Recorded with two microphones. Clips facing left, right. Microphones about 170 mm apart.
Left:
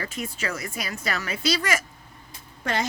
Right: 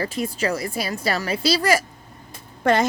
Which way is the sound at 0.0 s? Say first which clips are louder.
Right 7 dB; 35° right (ahead or behind).